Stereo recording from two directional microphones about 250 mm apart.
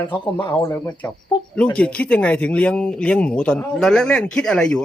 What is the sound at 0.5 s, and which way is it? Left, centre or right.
Speech, centre.